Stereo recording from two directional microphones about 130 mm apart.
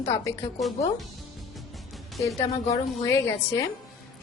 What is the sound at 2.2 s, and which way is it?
A woman's voice, 25° left (ahead or behind).